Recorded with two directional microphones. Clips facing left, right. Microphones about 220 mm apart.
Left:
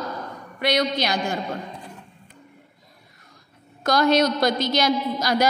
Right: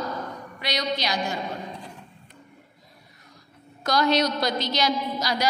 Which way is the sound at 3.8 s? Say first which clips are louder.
Left 3 dB; 50° left (ahead or behind).